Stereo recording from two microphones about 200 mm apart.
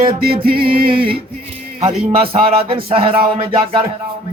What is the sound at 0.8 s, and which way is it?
Speech, 25° right (ahead or behind).